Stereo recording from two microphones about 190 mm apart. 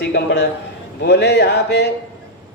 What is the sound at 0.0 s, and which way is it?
A man's voice, 60° left (ahead or behind).